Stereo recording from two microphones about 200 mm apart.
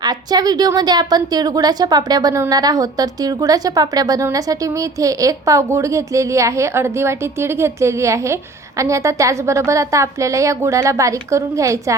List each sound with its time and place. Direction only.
0.0 s a woman's voice: 20° right (ahead or behind)